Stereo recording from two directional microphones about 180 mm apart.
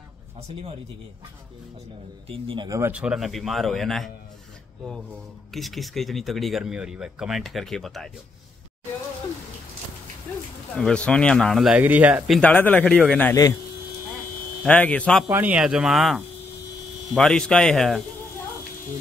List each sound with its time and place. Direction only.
2.2 s speech: 30° right (ahead or behind)
2.8 s speech: 5° right (ahead or behind)
5.5 s speech: centre (ahead or behind)
10.8 s speech: 5° left (ahead or behind)
12.4 s speech: 10° left (ahead or behind)
14.6 s speech: 10° left (ahead or behind)
15.2 s speech: 10° right (ahead or behind)